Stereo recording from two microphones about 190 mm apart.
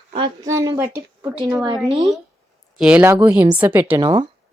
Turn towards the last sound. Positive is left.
turn(degrees=-25)  # may be behind; listen again after turning